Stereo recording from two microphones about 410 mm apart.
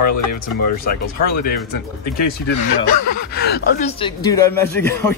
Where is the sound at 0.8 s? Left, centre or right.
Left.